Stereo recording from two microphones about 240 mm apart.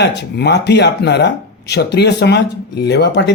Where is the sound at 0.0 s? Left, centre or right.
Left.